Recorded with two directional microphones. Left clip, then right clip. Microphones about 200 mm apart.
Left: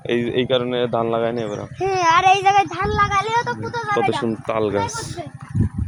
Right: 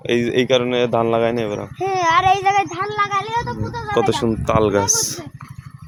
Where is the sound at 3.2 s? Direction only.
25° left (ahead or behind).